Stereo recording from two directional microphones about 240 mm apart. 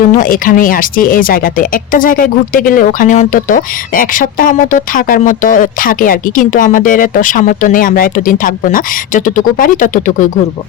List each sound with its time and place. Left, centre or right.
0.2 s speech: left